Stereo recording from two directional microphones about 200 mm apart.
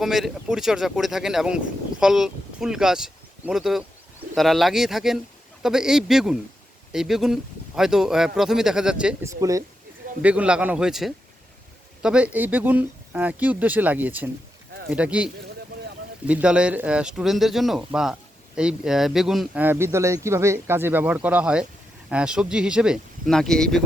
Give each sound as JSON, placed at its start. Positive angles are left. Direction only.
{"t": 0.0, "sound": "speech", "side_deg": 0}
{"t": 9.3, "sound": "speech", "side_deg": -15}